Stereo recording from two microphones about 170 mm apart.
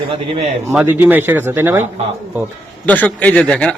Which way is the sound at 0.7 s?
10° right (ahead or behind).